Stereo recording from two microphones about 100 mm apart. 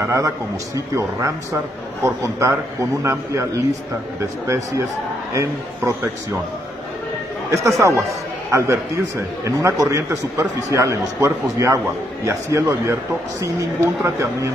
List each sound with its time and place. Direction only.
0.0 s a man's voice: 35° right (ahead or behind)
7.8 s a man's voice: 25° right (ahead or behind)